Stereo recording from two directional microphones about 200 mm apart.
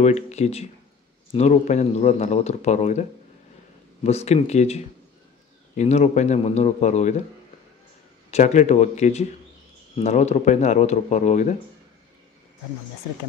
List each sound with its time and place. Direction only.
0.0 s speech: 35° left (ahead or behind)
8.3 s speech: 35° left (ahead or behind)